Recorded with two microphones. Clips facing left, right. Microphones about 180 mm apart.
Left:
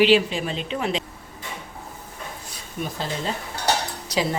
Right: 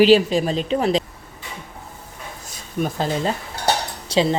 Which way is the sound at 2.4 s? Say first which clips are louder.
Right 8 dB; 45° right (ahead or behind).